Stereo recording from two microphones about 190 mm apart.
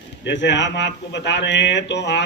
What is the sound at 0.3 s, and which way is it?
A man's voice, 70° left (ahead or behind).